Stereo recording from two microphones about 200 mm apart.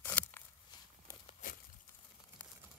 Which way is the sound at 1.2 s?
45° left (ahead or behind).